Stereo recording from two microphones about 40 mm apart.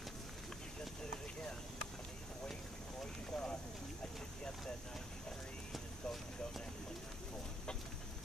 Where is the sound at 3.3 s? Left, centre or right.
Centre.